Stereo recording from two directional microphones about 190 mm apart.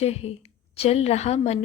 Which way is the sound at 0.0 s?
35° left (ahead or behind).